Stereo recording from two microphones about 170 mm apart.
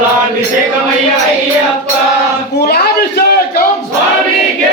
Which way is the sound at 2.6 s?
65° left (ahead or behind).